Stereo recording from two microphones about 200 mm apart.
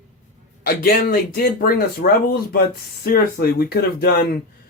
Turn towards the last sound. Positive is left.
turn(degrees=50)  # may be behind; listen again after turning